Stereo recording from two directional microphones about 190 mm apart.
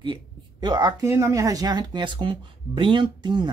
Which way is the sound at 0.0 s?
25° right (ahead or behind).